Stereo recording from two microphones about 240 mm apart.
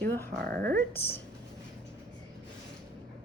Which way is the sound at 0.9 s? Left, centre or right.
Centre.